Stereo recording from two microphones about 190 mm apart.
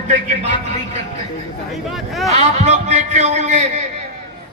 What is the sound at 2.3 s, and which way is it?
A man's voice, 35° right (ahead or behind).